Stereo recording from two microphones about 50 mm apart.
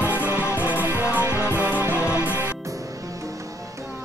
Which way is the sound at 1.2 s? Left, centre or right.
Right.